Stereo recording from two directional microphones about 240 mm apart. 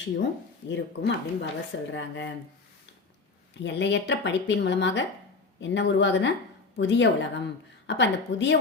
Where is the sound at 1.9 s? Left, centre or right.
Left.